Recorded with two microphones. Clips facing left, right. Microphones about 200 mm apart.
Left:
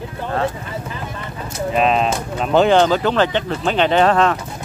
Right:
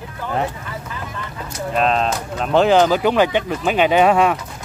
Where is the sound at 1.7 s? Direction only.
5° left (ahead or behind).